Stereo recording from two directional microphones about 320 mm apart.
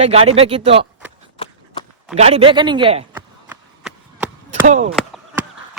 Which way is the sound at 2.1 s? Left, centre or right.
Centre.